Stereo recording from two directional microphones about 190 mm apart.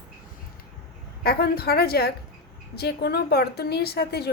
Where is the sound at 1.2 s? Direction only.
55° left (ahead or behind).